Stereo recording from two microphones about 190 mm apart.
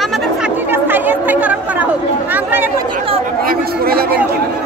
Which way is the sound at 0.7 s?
10° right (ahead or behind).